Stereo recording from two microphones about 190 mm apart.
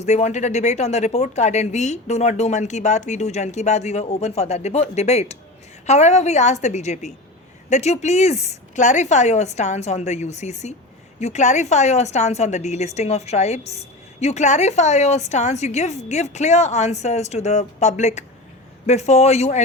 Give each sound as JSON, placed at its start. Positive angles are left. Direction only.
{"t": 0.0, "sound": "a woman's voice", "side_deg": 35}